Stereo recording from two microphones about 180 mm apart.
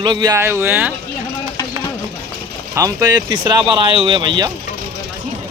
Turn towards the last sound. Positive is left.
turn(degrees=-25)  # may be behind; listen again after turning